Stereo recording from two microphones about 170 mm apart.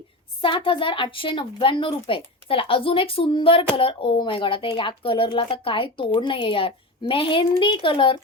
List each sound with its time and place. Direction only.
0.4 s speech: 30° left (ahead or behind)